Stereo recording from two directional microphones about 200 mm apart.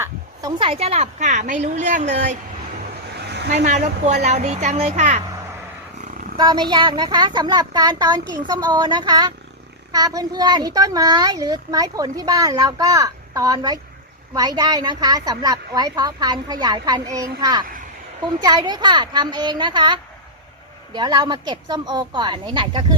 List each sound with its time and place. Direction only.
0.0 s speech: 20° right (ahead or behind); by 2.4 s 40° right (ahead or behind)
3.2 s a sound: 55° right (ahead or behind)
3.6 s speech: 35° right (ahead or behind)
6.3 s a child's voice: 20° right (ahead or behind)